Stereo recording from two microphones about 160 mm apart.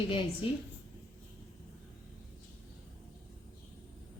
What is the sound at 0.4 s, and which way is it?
Speech, 30° left (ahead or behind).